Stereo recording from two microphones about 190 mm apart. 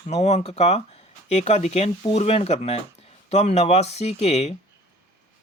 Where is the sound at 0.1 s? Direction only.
35° left (ahead or behind).